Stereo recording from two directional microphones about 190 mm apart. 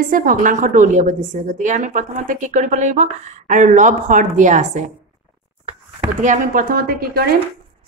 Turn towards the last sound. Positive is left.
turn(degrees=-50)  # may be behind; listen again after turning